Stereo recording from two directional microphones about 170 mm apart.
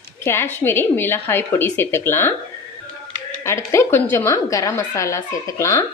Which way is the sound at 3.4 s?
15° left (ahead or behind).